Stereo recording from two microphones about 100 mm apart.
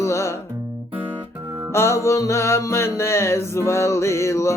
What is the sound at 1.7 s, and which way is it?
Music, 25° left (ahead or behind).